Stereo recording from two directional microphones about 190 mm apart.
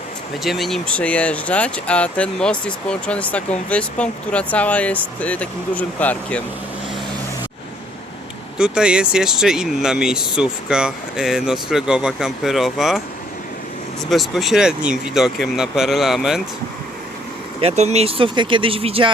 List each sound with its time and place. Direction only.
0.4 s speech: centre (ahead or behind)
8.5 s speech: 5° right (ahead or behind)
14.1 s speech: centre (ahead or behind)
17.6 s speech: 35° right (ahead or behind)